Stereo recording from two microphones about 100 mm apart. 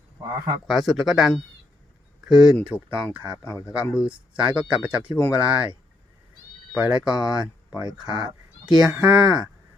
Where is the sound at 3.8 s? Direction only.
10° right (ahead or behind).